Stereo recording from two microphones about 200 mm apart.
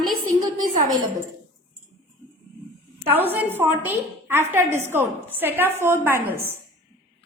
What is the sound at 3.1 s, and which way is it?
A woman's voice, 10° right (ahead or behind).